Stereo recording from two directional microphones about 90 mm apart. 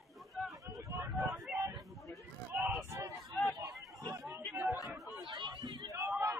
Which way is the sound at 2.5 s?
25° right (ahead or behind).